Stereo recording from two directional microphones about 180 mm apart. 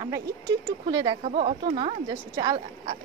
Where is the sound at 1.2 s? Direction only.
40° right (ahead or behind).